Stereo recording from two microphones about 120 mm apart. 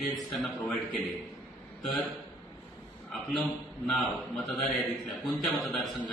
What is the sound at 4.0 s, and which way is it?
A man's voice, centre (ahead or behind).